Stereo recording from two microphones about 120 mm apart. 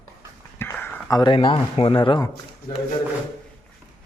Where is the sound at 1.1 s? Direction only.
40° left (ahead or behind).